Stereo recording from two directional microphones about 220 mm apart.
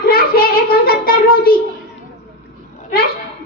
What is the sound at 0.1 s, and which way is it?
Child singing, 45° left (ahead or behind).